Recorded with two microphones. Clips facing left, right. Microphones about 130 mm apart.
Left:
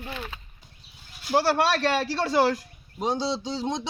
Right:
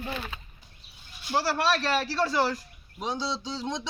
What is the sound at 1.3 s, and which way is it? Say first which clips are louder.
Speech: left 4 dB; 60° left (ahead or behind).